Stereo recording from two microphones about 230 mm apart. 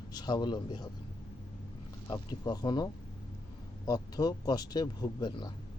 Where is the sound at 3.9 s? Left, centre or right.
Centre.